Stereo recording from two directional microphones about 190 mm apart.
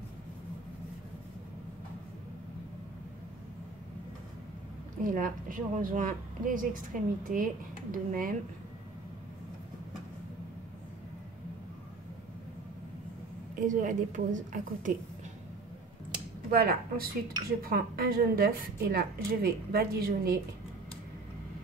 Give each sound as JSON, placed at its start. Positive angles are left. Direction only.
{"t": 5.0, "sound": "a woman's voice", "side_deg": -45}
{"t": 13.6, "sound": "a woman's voice", "side_deg": -45}
{"t": 16.1, "sound": "a sound", "side_deg": -50}
{"t": 17.6, "sound": "a woman's voice", "side_deg": -50}